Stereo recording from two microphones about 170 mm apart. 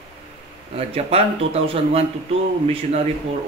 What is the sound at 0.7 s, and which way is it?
Speech, 35° right (ahead or behind).